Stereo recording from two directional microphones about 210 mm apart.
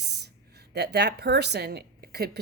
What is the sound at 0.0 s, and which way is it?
A woman's voice, 50° right (ahead or behind).